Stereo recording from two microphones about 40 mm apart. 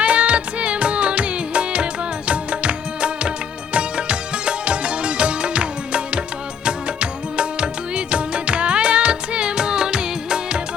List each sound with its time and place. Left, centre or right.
0.0 s music: right